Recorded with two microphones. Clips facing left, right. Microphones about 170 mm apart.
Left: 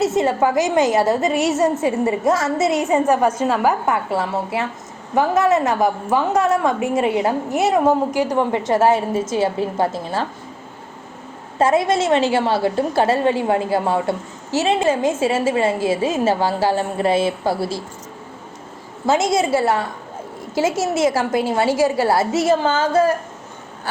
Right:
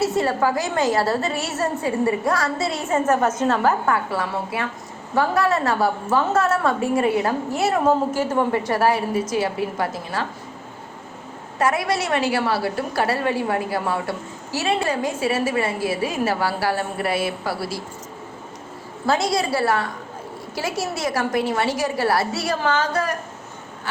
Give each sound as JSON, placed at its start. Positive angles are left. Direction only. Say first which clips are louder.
{"t": 0.0, "sound": "a woman's voice", "louder": "left 3 dB", "side_deg": 20}
{"t": 11.6, "sound": "a woman's voice", "louder": "left 5 dB", "side_deg": 25}
{"t": 19.0, "sound": "a woman's voice", "louder": "left 4 dB", "side_deg": 20}